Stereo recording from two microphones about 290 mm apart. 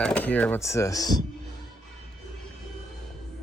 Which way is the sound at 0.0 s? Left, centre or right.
Centre.